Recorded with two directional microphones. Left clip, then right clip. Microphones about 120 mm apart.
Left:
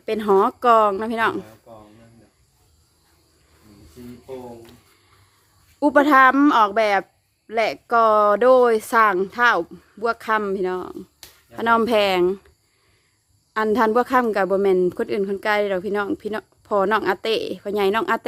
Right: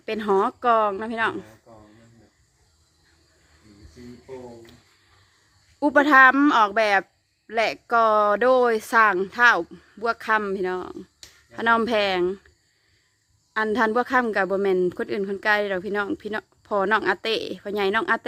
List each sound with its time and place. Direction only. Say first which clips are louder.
0.0 s a woman's voice: left 4 dB; 10° left (ahead or behind); by 1.5 s 25° left (ahead or behind)
1.6 s a sound: left 5 dB; 15° left (ahead or behind)
5.8 s speech: left 1 dB; 10° left (ahead or behind)
13.5 s speech: left 3 dB; 15° left (ahead or behind)